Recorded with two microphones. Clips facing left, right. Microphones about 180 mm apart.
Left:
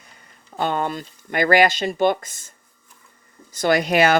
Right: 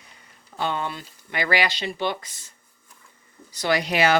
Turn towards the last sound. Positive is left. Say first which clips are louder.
# left 4 dB
turn(degrees=50)  # may be behind; listen again after turning